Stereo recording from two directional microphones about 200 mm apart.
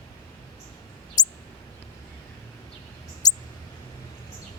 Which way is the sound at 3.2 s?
20° left (ahead or behind).